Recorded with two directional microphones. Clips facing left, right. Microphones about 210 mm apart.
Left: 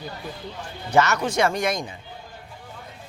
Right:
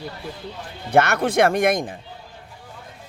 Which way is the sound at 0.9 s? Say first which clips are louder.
Right 2 dB; 55° right (ahead or behind).